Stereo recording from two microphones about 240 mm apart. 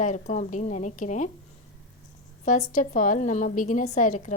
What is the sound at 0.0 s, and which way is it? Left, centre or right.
A woman's voice, left.